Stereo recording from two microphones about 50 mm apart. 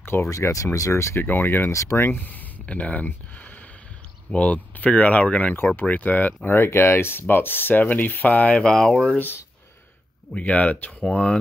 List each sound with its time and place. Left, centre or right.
0.0 s speech: left
0.3 s speech: left
1.2 s speech: left
1.7 s speech: left
2.6 s speech: left
4.4 s speech: left
8.6 s speech: centre
10.3 s speech: left